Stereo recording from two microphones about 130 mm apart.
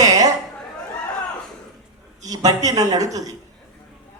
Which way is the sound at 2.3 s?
30° right (ahead or behind).